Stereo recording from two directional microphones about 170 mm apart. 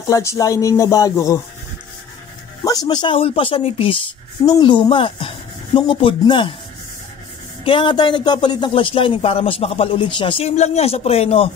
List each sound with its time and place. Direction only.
0.1 s speech: 20° left (ahead or behind)
2.6 s a man's voice: 20° left (ahead or behind)
7.6 s a man's voice: 30° left (ahead or behind)